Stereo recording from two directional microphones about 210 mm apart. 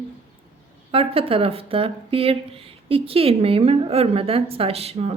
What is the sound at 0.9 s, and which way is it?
Speech, 25° right (ahead or behind).